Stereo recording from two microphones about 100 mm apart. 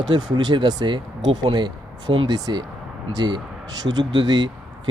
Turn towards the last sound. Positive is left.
turn(degrees=-45)  # may be behind; listen again after turning